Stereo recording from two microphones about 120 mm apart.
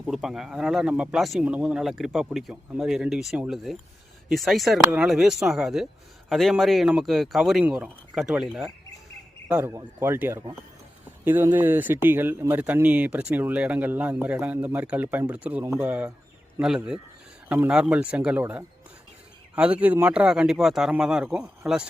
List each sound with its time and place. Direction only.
0.1 s speech: 5° right (ahead or behind)
11.5 s speech: 15° right (ahead or behind)
15.6 s speech: 20° right (ahead or behind)
16.6 s speech: 5° right (ahead or behind)